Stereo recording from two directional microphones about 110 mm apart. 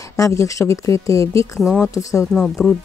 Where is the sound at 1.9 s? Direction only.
30° left (ahead or behind).